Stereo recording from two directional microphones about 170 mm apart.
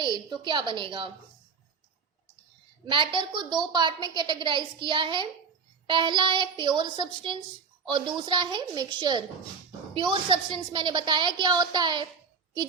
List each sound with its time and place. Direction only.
0.0 s a woman's voice: 25° right (ahead or behind)
2.9 s a woman's voice: 30° right (ahead or behind)